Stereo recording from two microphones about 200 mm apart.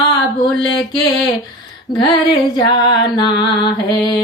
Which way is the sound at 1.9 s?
25° left (ahead or behind).